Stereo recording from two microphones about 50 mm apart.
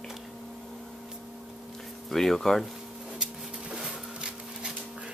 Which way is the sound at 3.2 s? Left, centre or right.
Centre.